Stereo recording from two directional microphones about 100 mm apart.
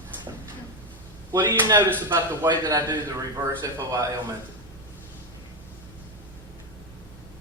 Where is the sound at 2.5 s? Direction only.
45° right (ahead or behind).